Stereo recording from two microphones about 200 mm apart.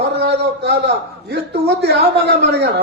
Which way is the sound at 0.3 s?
55° right (ahead or behind).